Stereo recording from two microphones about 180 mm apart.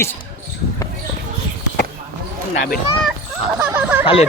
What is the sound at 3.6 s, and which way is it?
Speech, 5° right (ahead or behind).